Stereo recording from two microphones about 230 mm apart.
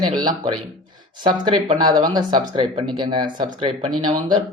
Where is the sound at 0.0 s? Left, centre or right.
Centre.